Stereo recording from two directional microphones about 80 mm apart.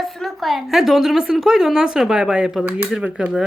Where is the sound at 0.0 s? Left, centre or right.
Centre.